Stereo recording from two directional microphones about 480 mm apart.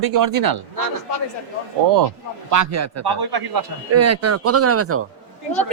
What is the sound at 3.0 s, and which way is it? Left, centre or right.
Speech, right.